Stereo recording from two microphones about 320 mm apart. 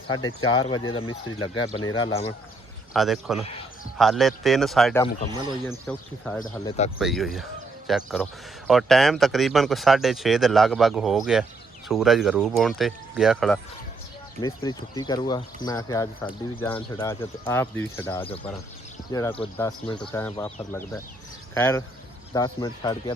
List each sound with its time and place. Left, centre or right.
0.1 s speech: centre
2.9 s speech: centre
6.7 s speech: centre
7.0 s speech: centre
14.4 s speech: centre
21.5 s speech: centre